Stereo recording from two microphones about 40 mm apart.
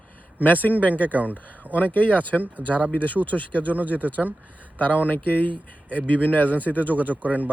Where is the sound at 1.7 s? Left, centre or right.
Left.